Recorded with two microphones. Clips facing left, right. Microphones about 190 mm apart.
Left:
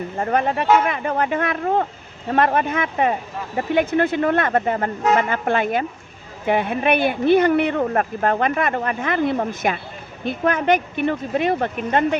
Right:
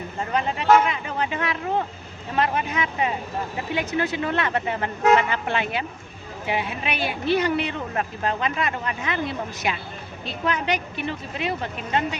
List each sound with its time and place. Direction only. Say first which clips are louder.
0.2 s speech: left 5 dB; 55° left (ahead or behind)